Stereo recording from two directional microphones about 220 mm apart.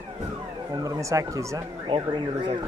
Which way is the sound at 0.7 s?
15° right (ahead or behind).